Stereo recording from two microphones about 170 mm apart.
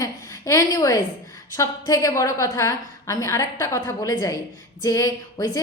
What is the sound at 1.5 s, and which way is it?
A woman's voice, 20° left (ahead or behind).